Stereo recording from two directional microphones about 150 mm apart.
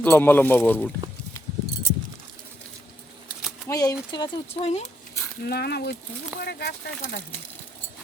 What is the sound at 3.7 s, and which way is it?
Speech, 25° left (ahead or behind).